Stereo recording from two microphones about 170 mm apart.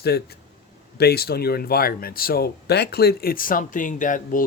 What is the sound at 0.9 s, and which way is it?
Speech, 70° left (ahead or behind).